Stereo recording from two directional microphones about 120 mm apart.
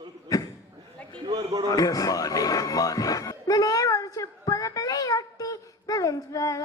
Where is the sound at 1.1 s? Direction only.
35° right (ahead or behind).